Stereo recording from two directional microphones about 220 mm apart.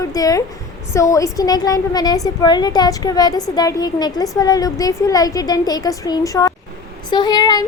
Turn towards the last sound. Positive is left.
turn(degrees=20)  # may be behind; listen again after turning